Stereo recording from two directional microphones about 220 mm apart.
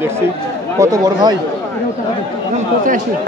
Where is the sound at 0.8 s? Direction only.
15° right (ahead or behind).